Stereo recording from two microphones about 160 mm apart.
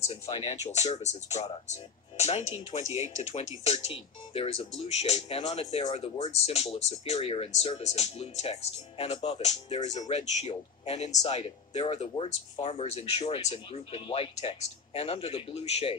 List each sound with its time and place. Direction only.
0.0 s speech: 40° left (ahead or behind)